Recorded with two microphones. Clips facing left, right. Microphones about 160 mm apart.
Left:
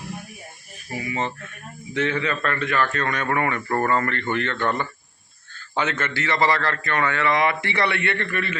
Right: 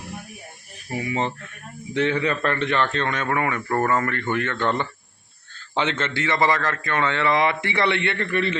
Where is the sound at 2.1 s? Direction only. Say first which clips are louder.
Right 3 dB; 20° right (ahead or behind).